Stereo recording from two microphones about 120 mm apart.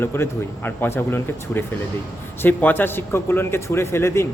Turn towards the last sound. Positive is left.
turn(degrees=20)  # may be behind; listen again after turning